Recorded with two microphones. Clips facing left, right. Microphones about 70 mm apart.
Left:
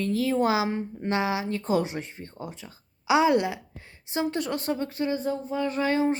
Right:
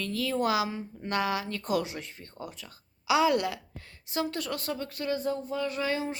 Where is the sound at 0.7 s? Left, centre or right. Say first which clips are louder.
Left 7 dB; left.